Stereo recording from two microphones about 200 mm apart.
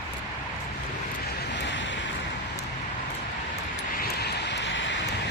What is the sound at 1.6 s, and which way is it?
Vehicle, 65° left (ahead or behind).